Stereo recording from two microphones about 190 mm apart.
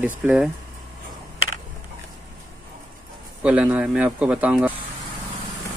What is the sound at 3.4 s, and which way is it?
Speech, 5° right (ahead or behind).